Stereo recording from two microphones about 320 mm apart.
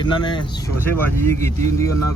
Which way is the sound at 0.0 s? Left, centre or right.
Centre.